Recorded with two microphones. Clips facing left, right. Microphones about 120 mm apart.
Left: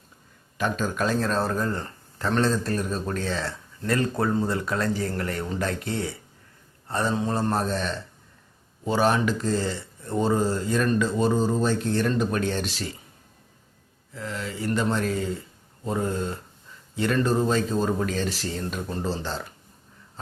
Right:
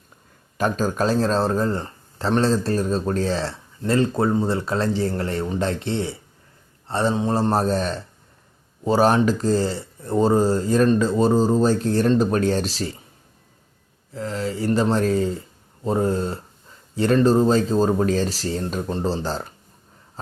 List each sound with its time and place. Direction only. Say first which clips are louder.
0.5 s speech: right 4 dB; 40° right (ahead or behind)
14.1 s speech: right 6 dB; 35° right (ahead or behind)